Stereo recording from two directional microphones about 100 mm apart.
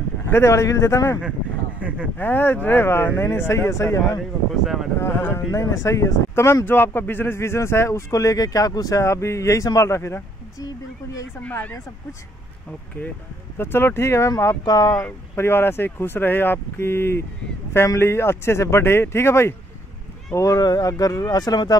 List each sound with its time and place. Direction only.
0.3 s speech: 30° left (ahead or behind)
1.8 s a sound: 15° right (ahead or behind)
2.1 s speech: 20° left (ahead or behind)
13.6 s speech: 25° left (ahead or behind)
14.6 s speech: 40° left (ahead or behind)
15.0 s speech: 25° left (ahead or behind)
20.3 s speech: 35° left (ahead or behind)